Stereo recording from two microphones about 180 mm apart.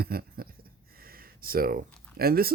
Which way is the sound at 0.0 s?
55° right (ahead or behind).